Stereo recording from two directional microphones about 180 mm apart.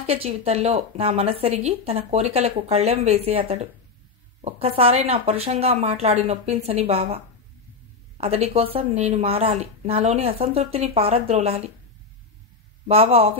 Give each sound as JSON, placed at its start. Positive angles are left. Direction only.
{"t": 0.0, "sound": "speech", "side_deg": -35}
{"t": 8.2, "sound": "speech", "side_deg": -35}
{"t": 12.8, "sound": "speech", "side_deg": -35}